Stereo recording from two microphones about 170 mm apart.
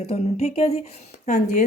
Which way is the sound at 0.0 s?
35° left (ahead or behind).